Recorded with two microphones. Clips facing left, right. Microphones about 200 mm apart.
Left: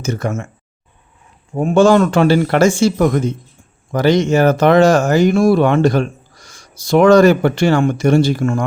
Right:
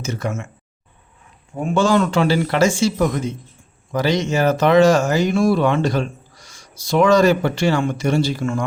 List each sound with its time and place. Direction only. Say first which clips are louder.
0.0 s speech: left 4 dB; 50° left (ahead or behind)
1.5 s speech: left 6 dB; 45° left (ahead or behind)